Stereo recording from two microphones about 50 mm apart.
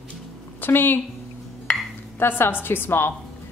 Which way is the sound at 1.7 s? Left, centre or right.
Centre.